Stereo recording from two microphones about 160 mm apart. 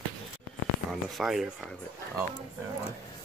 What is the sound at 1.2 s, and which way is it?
Speech, centre (ahead or behind).